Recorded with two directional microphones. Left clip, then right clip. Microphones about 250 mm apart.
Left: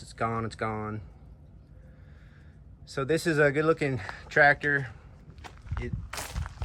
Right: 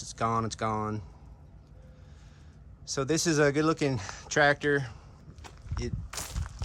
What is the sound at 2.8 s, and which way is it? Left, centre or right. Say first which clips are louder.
Speech: left 1 dB; centre.